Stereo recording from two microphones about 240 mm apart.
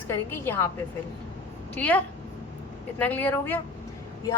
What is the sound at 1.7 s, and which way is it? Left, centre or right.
A woman's voice, centre.